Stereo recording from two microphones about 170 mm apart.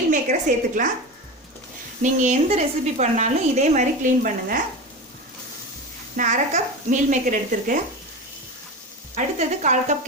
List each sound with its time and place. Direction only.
0.1 s a sound: 50° right (ahead or behind)
2.0 s speech: 45° right (ahead or behind)
6.1 s speech: 45° right (ahead or behind)
9.1 s speech: 45° right (ahead or behind)